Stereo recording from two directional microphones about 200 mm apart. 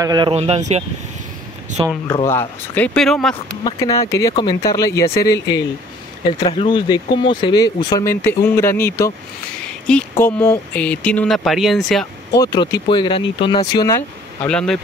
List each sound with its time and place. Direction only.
0.0 s speech: 20° right (ahead or behind)
0.3 s speech: 30° right (ahead or behind)
2.0 s speech: 15° left (ahead or behind)
3.6 s speech: 15° left (ahead or behind); by 12.1 s centre (ahead or behind)
12.3 s speech: 20° left (ahead or behind); by 14.8 s 5° left (ahead or behind)